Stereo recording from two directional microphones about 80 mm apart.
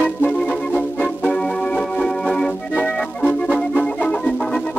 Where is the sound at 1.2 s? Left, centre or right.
Centre.